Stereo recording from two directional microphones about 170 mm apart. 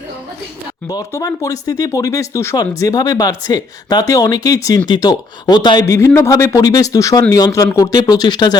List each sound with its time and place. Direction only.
0.9 s speech: 20° left (ahead or behind)